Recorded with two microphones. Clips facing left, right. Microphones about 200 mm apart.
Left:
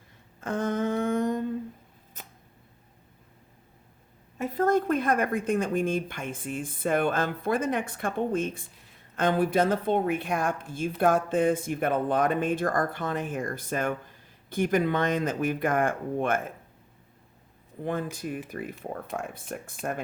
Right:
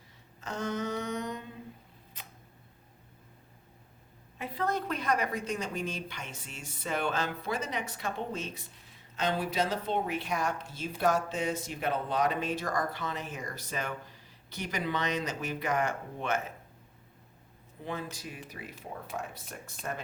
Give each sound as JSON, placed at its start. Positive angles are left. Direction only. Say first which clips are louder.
{"t": 0.4, "sound": "a sound", "louder": "left 6 dB", "side_deg": 55}
{"t": 4.4, "sound": "speech", "louder": "left 9 dB", "side_deg": 45}
{"t": 17.8, "sound": "speech", "louder": "left 7 dB", "side_deg": 50}